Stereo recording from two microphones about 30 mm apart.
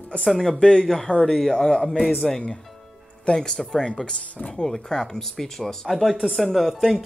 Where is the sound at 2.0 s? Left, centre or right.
Centre.